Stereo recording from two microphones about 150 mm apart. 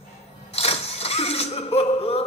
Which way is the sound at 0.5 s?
45° left (ahead or behind).